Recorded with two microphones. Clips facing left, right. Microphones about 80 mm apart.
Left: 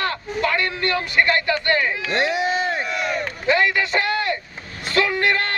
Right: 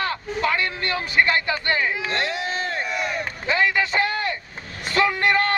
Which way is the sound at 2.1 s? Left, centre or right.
Centre.